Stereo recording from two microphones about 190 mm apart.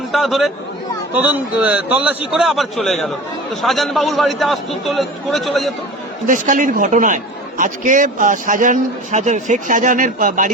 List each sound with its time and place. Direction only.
0.1 s a man's voice: centre (ahead or behind)
6.2 s a man's voice: 45° right (ahead or behind)